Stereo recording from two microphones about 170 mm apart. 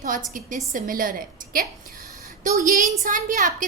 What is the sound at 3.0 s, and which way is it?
Speech, 50° right (ahead or behind).